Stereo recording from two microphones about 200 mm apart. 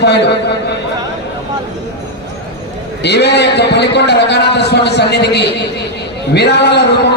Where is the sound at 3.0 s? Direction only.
55° left (ahead or behind).